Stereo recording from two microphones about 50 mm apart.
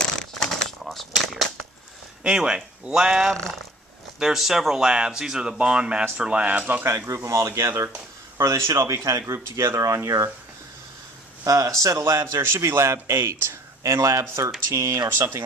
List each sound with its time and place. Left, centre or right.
0.0 s a sound: centre
2.2 s speech: centre; by 6.8 s right
7.3 s speech: right
11.8 s speech: right
14.7 s speech: right
15.2 s speech: right